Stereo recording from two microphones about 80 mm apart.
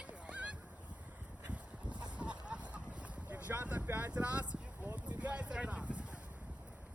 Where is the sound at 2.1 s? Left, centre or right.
Centre.